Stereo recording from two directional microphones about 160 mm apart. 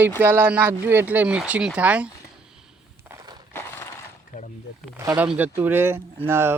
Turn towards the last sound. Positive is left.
turn(degrees=-15)  # may be behind; listen again after turning